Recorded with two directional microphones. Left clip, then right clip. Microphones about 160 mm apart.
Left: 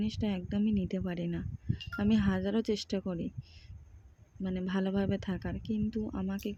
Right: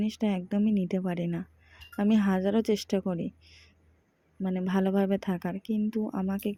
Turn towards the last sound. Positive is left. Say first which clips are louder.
# right 5 dB
turn(degrees=-20)  # may be behind; listen again after turning